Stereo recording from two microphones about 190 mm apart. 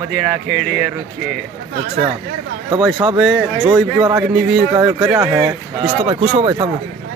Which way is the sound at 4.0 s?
20° right (ahead or behind).